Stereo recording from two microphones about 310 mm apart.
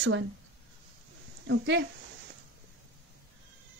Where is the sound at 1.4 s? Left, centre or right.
Right.